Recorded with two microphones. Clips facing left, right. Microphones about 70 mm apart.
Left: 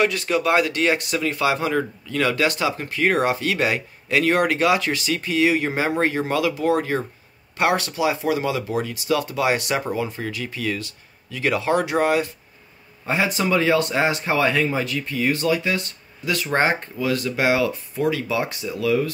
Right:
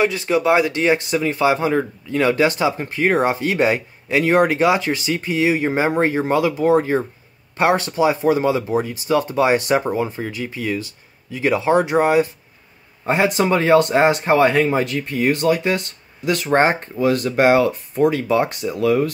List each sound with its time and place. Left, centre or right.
0.0 s a man's voice: right
13.0 s speech: right